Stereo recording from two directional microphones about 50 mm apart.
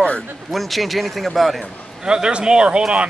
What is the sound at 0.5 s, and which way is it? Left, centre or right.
A woman's voice, centre.